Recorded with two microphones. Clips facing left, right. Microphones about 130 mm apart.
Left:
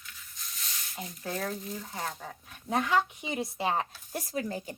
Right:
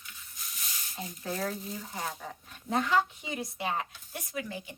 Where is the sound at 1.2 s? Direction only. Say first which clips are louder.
Even; 5° right (ahead or behind).